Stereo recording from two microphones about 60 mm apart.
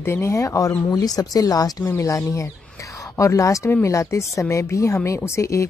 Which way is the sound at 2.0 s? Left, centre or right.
Left.